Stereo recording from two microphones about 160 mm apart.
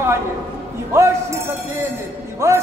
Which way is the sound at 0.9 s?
15° right (ahead or behind).